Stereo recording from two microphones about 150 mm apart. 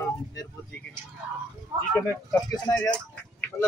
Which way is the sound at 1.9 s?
15° left (ahead or behind).